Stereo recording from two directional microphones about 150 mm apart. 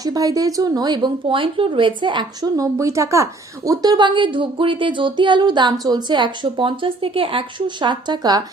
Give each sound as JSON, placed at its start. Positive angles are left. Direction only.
{"t": 0.0, "sound": "speech", "side_deg": -25}